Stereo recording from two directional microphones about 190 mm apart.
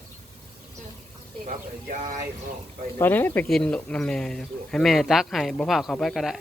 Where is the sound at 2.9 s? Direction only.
10° left (ahead or behind).